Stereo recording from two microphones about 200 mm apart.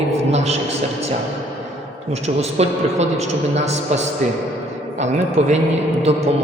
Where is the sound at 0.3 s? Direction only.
30° right (ahead or behind).